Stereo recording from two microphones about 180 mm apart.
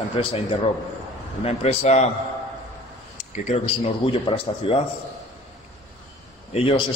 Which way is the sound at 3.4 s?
35° left (ahead or behind).